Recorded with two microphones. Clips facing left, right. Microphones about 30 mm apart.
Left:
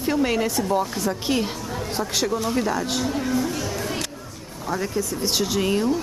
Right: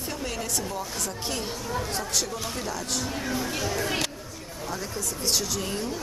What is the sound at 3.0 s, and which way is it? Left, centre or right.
Speech, centre.